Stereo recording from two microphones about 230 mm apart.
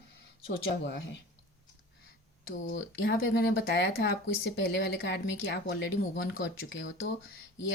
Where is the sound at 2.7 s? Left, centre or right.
Left.